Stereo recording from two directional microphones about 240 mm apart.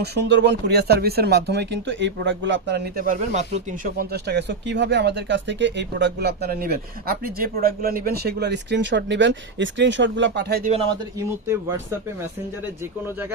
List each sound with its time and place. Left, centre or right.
0.0 s speech: right